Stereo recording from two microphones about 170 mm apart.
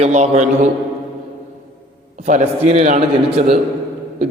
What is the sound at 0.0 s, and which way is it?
Speech, 40° right (ahead or behind).